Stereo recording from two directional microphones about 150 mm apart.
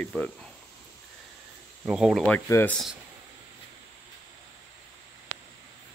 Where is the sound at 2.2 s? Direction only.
15° left (ahead or behind).